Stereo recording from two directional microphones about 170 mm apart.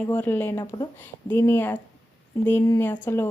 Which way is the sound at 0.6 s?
25° left (ahead or behind).